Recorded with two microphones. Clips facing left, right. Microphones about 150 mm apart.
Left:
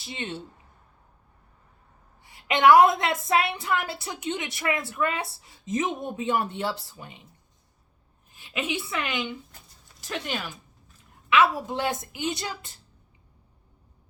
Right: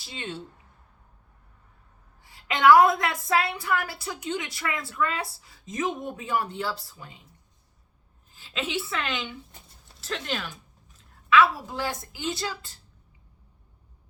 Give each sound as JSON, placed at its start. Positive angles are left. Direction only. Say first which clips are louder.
{"t": 0.0, "sound": "a woman's voice", "louder": "left 2 dB", "side_deg": 25}
{"t": 2.2, "sound": "a woman's voice", "louder": "even", "side_deg": 20}
{"t": 8.3, "sound": "a woman's voice", "louder": "left 1 dB", "side_deg": 15}